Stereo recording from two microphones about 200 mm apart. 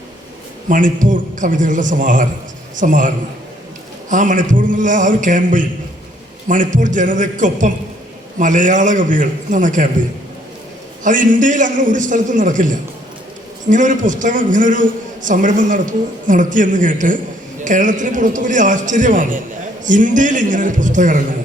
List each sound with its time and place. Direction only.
0.7 s a man's voice: 40° right (ahead or behind)
4.1 s a man's voice: 40° right (ahead or behind)
11.0 s a man's voice: 40° right (ahead or behind)